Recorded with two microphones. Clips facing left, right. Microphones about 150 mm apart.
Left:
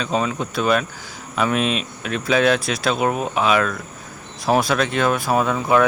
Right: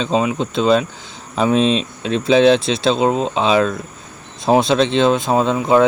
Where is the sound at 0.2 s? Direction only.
20° right (ahead or behind).